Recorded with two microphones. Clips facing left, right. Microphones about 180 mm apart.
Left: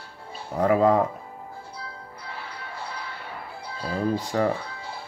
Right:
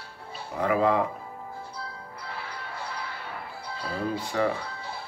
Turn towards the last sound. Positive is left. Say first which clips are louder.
# left 3 dB
turn(degrees=40)  # may be behind; listen again after turning